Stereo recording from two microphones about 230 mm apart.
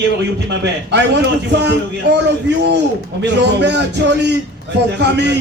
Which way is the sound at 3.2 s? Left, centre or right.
Right.